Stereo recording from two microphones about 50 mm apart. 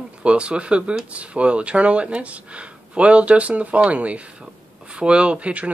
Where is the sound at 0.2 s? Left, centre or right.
Right.